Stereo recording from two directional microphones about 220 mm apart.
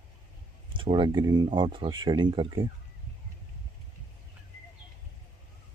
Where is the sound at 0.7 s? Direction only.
20° right (ahead or behind).